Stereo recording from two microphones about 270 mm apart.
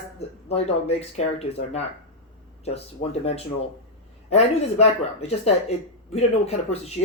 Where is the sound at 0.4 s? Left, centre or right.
Left.